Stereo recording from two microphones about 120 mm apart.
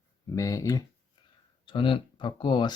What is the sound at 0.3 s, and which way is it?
Speech, 25° left (ahead or behind).